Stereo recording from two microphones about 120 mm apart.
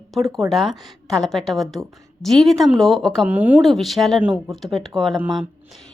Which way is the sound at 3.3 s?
15° right (ahead or behind).